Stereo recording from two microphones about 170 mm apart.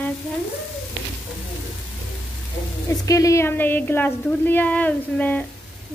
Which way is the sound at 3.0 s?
20° left (ahead or behind).